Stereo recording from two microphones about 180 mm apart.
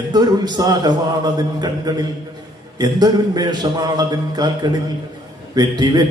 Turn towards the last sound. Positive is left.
turn(degrees=-20)  # may be behind; listen again after turning